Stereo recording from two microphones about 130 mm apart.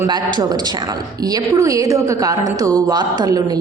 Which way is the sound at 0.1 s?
35° right (ahead or behind).